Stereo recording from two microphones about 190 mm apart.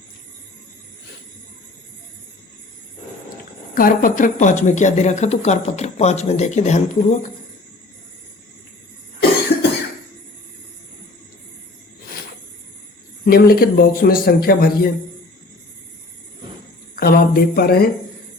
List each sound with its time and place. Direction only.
3.8 s speech: 45° left (ahead or behind)
13.2 s a man's voice: 50° left (ahead or behind)
16.9 s speech: 50° left (ahead or behind)